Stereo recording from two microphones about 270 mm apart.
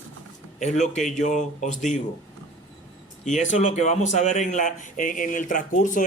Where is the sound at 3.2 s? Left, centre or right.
Left.